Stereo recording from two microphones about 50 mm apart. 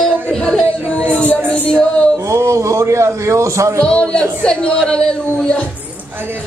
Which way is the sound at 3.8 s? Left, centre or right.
Left.